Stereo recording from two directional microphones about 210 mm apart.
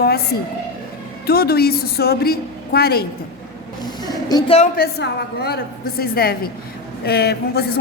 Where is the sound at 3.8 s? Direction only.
20° left (ahead or behind).